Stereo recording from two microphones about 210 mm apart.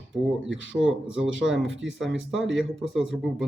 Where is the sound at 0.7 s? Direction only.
5° right (ahead or behind).